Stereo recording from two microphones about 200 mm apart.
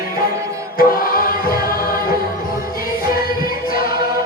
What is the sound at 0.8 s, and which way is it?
Music, 45° left (ahead or behind).